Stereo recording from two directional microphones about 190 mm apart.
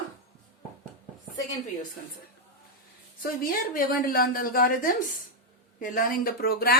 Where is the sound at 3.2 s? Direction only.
50° left (ahead or behind).